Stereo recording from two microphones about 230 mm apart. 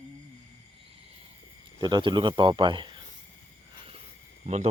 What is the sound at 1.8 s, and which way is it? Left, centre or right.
Speech, centre.